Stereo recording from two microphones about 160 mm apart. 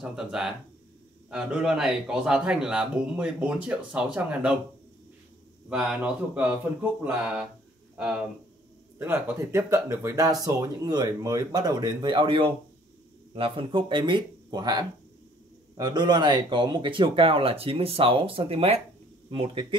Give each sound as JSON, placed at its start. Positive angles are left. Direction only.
{"t": 0.0, "sound": "speech", "side_deg": -5}
{"t": 5.7, "sound": "speech", "side_deg": -5}
{"t": 8.0, "sound": "speech", "side_deg": -5}